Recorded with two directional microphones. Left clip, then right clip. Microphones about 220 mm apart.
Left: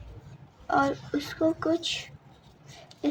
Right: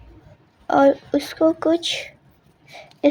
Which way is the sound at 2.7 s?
30° right (ahead or behind).